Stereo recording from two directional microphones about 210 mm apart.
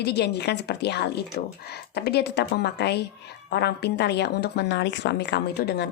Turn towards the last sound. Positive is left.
turn(degrees=50)  # may be behind; listen again after turning